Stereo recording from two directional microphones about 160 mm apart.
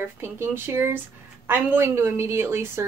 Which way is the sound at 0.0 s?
15° right (ahead or behind).